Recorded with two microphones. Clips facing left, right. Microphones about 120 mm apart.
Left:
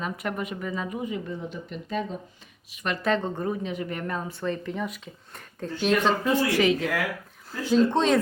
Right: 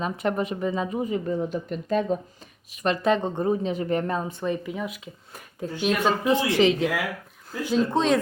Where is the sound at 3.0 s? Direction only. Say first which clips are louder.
Right 2 dB; 15° right (ahead or behind).